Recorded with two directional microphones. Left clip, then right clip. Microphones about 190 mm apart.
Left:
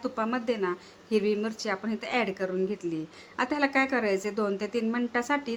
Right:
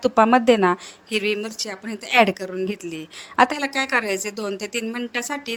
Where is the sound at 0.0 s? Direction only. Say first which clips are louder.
Right 14 dB; 45° right (ahead or behind).